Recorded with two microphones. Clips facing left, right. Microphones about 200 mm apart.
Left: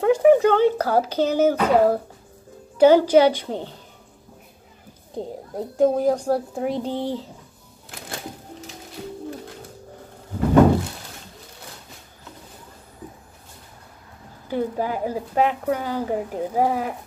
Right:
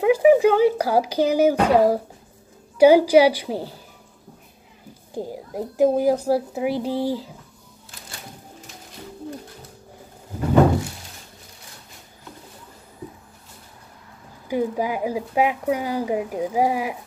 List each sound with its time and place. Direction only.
0.0 s a sound: 5° right (ahead or behind)
2.8 s speech: 10° right (ahead or behind)
5.1 s speech: 5° right (ahead or behind)
14.5 s speech: 10° right (ahead or behind)